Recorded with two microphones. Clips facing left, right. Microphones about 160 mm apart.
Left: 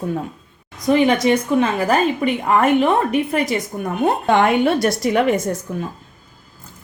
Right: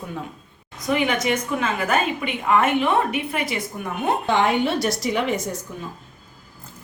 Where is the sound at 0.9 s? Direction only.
35° left (ahead or behind).